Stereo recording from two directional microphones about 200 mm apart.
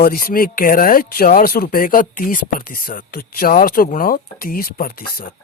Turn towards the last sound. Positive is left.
turn(degrees=45)  # may be behind; listen again after turning